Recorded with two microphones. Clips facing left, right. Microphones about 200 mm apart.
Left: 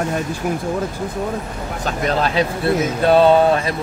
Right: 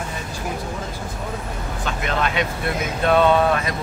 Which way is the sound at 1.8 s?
40° left (ahead or behind).